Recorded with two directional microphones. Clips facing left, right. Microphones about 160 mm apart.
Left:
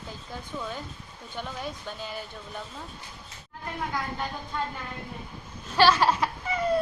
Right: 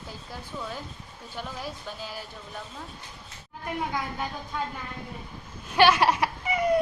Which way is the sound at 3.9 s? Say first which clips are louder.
Even; 5° right (ahead or behind).